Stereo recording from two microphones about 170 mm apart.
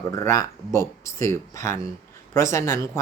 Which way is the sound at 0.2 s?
15° left (ahead or behind).